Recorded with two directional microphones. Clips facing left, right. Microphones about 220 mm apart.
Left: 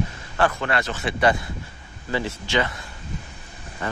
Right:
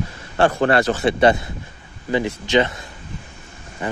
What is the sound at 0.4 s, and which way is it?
Speech, 35° right (ahead or behind).